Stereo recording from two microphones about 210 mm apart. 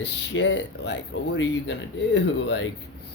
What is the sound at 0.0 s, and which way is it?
Speech, 55° left (ahead or behind).